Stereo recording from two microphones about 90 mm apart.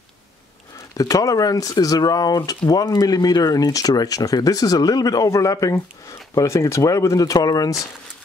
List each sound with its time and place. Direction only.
0.9 s speech: 40° left (ahead or behind)